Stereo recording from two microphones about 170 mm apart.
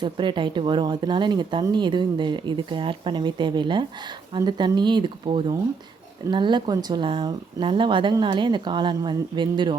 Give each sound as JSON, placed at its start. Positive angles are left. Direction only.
{"t": 0.0, "sound": "speech", "side_deg": -30}